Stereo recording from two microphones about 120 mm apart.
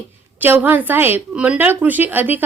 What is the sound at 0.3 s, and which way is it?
A woman's voice, 15° right (ahead or behind).